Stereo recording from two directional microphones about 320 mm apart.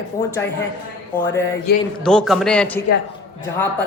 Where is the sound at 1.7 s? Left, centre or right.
Left.